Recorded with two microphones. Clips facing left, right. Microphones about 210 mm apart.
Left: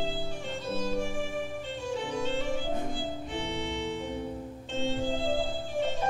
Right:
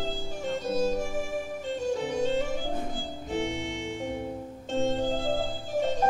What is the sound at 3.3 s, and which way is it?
Organ, 45° right (ahead or behind).